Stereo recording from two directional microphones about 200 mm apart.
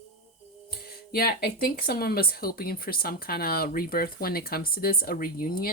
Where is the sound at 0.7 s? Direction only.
50° left (ahead or behind).